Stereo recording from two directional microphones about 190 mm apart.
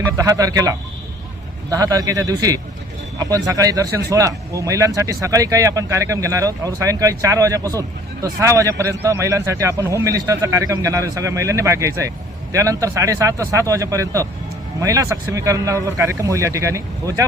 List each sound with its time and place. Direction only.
0.2 s a man's voice: 15° right (ahead or behind)